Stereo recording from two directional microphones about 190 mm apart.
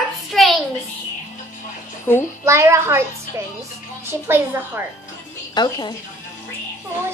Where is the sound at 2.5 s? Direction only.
15° right (ahead or behind).